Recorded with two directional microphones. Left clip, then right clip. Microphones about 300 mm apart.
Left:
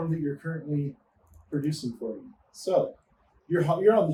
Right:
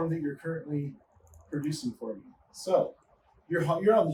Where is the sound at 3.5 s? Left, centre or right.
Centre.